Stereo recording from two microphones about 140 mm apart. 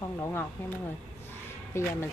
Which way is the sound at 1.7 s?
20° left (ahead or behind).